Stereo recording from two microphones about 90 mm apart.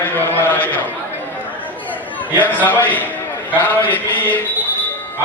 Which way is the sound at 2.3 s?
20° left (ahead or behind).